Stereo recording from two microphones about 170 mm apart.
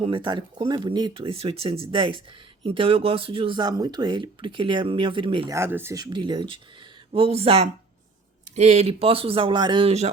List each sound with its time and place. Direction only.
0.0 s speech: 30° right (ahead or behind)
5.5 s speech: 15° right (ahead or behind); by 10.1 s 35° right (ahead or behind)